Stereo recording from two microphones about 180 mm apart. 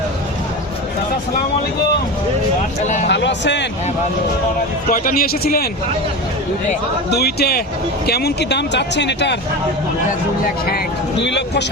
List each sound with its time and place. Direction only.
3.1 s speech: 75° left (ahead or behind)
4.9 s a man's voice: 55° left (ahead or behind)
7.1 s a man's voice: 65° left (ahead or behind)
11.2 s speech: 70° left (ahead or behind)